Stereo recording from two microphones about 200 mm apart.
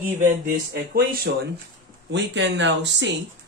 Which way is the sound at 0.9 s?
50° right (ahead or behind).